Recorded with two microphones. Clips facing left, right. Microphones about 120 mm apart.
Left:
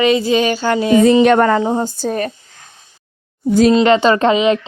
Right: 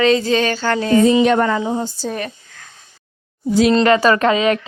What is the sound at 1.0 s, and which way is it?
Speech, 60° left (ahead or behind).